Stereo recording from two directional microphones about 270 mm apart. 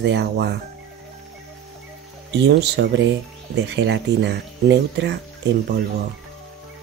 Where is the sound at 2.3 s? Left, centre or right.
Right.